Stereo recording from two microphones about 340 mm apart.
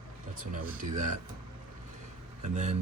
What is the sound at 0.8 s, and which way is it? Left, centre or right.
Speech, right.